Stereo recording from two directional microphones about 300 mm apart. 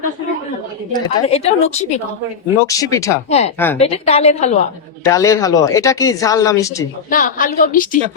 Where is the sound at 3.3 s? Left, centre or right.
Left.